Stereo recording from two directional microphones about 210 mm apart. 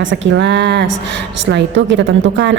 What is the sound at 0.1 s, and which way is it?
A woman's voice, 60° right (ahead or behind).